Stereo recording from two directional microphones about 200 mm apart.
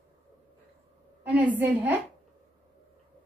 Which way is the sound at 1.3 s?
10° right (ahead or behind).